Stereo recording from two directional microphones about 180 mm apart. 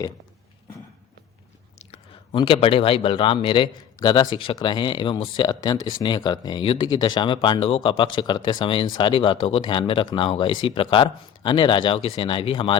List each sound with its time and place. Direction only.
1.8 s speech: 30° left (ahead or behind)